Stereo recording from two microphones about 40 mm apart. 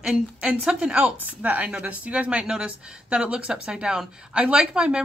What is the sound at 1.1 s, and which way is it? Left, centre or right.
A woman's voice, right.